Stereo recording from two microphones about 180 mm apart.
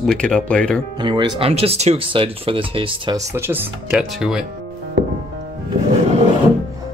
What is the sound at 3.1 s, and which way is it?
Speech, 15° right (ahead or behind).